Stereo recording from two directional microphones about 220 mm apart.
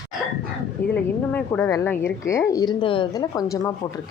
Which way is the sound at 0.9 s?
5° left (ahead or behind).